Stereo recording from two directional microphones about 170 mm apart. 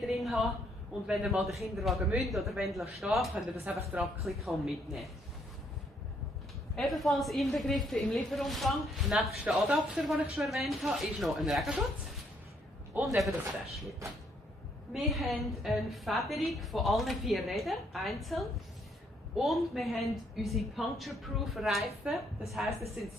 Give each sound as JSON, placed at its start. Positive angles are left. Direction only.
{"t": 0.0, "sound": "a sound", "side_deg": 0}
{"t": 1.0, "sound": "a woman's voice", "side_deg": -5}
{"t": 6.7, "sound": "a woman's voice", "side_deg": 0}
{"t": 12.9, "sound": "a woman's voice", "side_deg": 0}